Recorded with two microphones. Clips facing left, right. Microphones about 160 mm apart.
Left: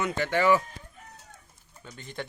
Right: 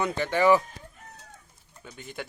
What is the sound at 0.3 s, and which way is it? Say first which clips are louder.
Speech: right 2 dB; 10° right (ahead or behind).